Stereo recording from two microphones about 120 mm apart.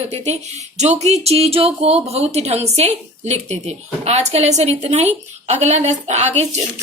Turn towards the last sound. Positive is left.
turn(degrees=-70)  # may be behind; listen again after turning